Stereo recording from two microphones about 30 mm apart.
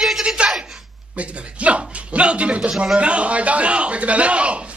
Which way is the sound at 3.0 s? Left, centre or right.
Right.